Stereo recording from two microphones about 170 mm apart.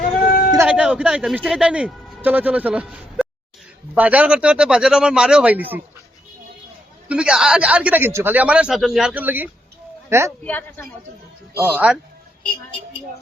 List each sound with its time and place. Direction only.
0.3 s bleat: 60° left (ahead or behind)
0.7 s a man's voice: 5° right (ahead or behind)
7.1 s a man's voice: 5° right (ahead or behind)
10.4 s a woman's voice: 10° left (ahead or behind)
11.5 s speech: 10° right (ahead or behind)